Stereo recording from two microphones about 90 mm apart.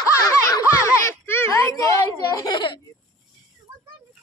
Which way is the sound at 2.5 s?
55° left (ahead or behind).